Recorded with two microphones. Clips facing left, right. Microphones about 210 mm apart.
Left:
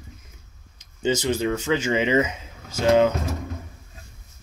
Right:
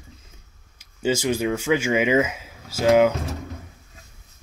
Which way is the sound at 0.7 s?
10° right (ahead or behind).